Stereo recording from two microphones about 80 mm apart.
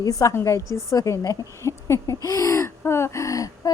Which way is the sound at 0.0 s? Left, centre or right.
Left.